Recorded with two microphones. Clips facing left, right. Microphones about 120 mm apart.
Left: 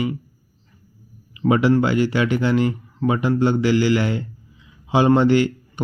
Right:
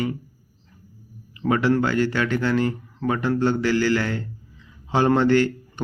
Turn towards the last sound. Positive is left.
turn(degrees=15)  # may be behind; listen again after turning